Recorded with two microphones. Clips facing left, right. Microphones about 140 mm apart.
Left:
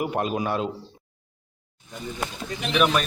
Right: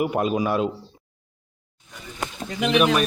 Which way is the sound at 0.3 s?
5° right (ahead or behind).